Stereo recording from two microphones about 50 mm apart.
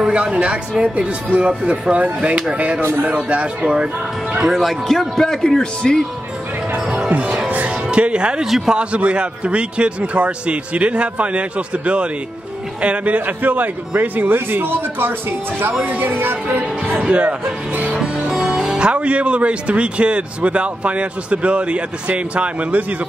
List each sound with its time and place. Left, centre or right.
0.0 s speech: right
2.8 s speech: right
3.6 s speech: centre
4.6 s speech: centre
7.4 s music: right
8.5 s speech: centre
8.7 s a man's voice: right
15.7 s speech: right
16.0 s speech: right
17.1 s speech: right
17.9 s speech: centre; by 22.9 s right